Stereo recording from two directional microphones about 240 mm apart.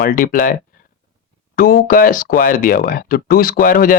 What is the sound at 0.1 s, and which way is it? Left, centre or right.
Speech, left.